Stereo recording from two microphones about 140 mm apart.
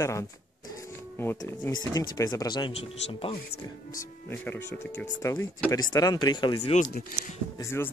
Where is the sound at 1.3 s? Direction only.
25° left (ahead or behind).